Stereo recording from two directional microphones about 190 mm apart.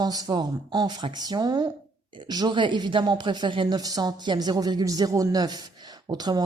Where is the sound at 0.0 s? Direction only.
20° right (ahead or behind).